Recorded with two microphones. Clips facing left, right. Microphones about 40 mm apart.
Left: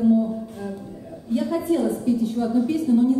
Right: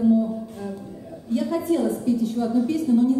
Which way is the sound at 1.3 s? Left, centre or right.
Centre.